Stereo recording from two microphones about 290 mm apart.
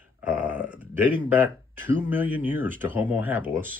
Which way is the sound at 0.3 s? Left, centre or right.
Centre.